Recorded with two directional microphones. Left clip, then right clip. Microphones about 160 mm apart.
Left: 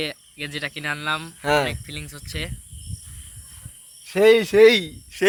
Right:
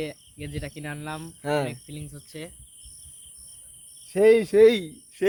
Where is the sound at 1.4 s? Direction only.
20° left (ahead or behind).